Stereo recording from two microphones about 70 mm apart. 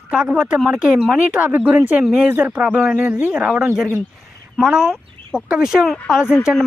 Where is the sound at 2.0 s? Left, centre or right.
Centre.